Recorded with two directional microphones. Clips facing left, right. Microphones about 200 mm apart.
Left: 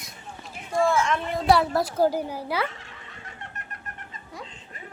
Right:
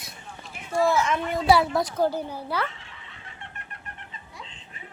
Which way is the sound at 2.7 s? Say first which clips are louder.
Left 3 dB; 45° left (ahead or behind).